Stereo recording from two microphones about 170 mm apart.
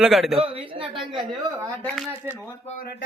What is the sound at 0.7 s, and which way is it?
Speech, 30° right (ahead or behind).